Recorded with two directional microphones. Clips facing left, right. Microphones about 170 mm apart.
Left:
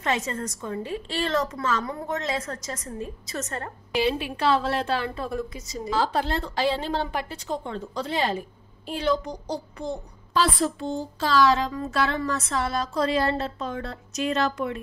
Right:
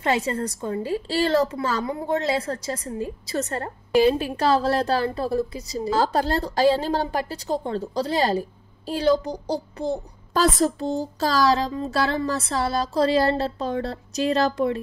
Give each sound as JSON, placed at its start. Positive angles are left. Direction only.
{"t": 0.0, "sound": "a woman's voice", "side_deg": -30}